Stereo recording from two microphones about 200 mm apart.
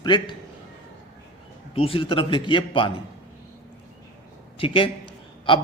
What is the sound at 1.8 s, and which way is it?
Speech, 30° left (ahead or behind).